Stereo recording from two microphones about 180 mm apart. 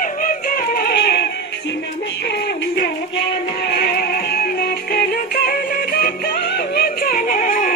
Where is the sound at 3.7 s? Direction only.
60° left (ahead or behind).